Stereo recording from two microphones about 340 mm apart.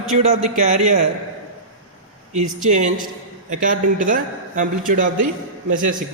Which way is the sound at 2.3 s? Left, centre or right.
Right.